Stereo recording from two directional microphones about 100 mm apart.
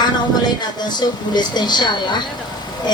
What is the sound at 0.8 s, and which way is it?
A woman's voice, 45° left (ahead or behind).